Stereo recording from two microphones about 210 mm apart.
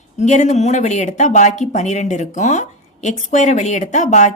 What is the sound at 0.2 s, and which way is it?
Speech, 35° left (ahead or behind).